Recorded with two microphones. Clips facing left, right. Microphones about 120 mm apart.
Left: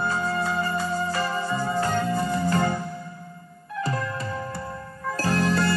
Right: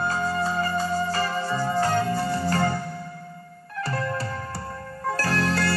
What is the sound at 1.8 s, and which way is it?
Music, 35° right (ahead or behind).